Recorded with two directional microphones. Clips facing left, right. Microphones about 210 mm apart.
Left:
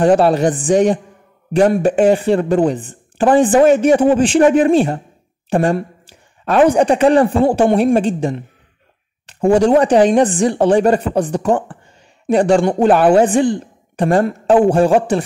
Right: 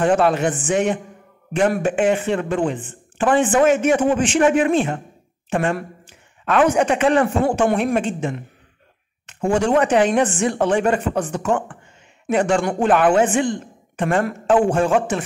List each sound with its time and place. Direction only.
0.0 s speech: 35° left (ahead or behind)
7.4 s a man's voice: 25° left (ahead or behind)
7.7 s speech: 35° left (ahead or behind)